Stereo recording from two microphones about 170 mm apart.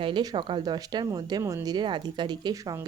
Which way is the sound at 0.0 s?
25° right (ahead or behind).